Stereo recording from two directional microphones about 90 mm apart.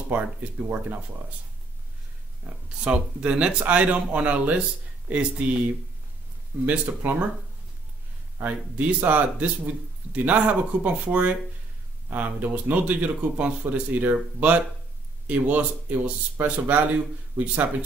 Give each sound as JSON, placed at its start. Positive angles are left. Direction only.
{"t": 0.1, "sound": "speech", "side_deg": -15}
{"t": 2.8, "sound": "speech", "side_deg": -15}
{"t": 6.6, "sound": "speech", "side_deg": -20}
{"t": 8.4, "sound": "speech", "side_deg": -15}